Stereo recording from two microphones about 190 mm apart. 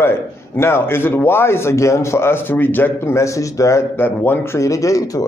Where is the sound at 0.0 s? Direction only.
10° left (ahead or behind).